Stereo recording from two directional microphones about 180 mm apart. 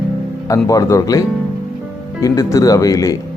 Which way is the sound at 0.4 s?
20° left (ahead or behind).